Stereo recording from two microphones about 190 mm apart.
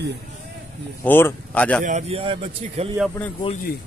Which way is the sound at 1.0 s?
10° left (ahead or behind).